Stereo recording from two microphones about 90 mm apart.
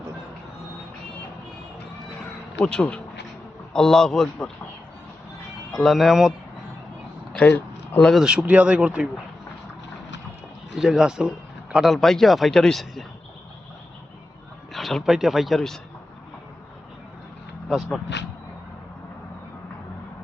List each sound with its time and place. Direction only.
2.6 s a man's voice: 10° left (ahead or behind)
5.7 s a man's voice: centre (ahead or behind)
7.3 s a sound: 20° left (ahead or behind)
8.2 s speech: 10° right (ahead or behind)
10.8 s a man's voice: 5° right (ahead or behind)
14.7 s a man's voice: centre (ahead or behind)
17.7 s a man's voice: centre (ahead or behind)